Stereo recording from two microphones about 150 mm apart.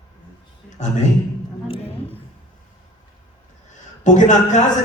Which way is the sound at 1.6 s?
40° left (ahead or behind).